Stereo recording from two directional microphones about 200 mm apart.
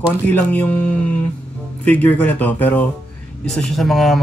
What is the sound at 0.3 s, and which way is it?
Speech, 10° left (ahead or behind).